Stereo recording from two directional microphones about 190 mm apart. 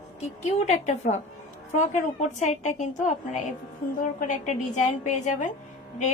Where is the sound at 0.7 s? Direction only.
35° left (ahead or behind).